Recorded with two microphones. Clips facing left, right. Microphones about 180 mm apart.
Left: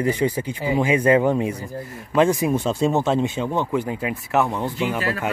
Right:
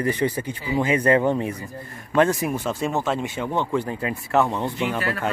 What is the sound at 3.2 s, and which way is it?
Speech, 15° left (ahead or behind).